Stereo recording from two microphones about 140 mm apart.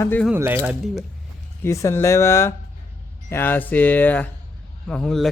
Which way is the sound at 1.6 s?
20° left (ahead or behind).